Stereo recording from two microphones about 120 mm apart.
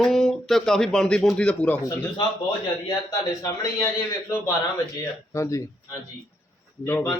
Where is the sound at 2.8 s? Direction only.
30° left (ahead or behind).